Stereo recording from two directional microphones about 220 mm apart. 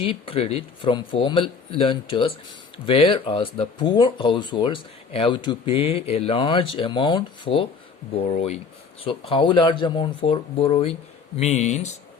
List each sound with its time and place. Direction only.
0.0 s speech: 25° left (ahead or behind)